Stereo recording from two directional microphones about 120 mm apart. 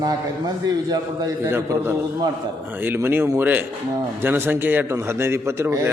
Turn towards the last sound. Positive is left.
turn(degrees=-20)  # may be behind; listen again after turning